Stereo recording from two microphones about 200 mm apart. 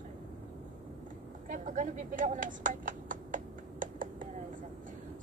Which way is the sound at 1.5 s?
40° right (ahead or behind).